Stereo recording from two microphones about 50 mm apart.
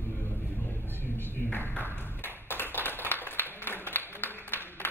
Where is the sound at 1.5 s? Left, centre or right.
Left.